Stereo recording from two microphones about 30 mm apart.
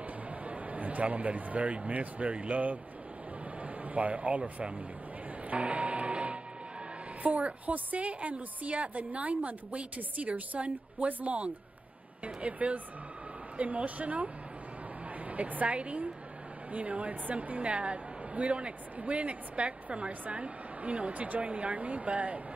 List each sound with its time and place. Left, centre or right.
0.5 s a man's voice: right
3.8 s speech: right
5.6 s music: right
7.2 s a woman's voice: right
12.4 s a woman's voice: right
17.6 s a woman's voice: right
21.1 s a woman's voice: right
21.4 s speech: right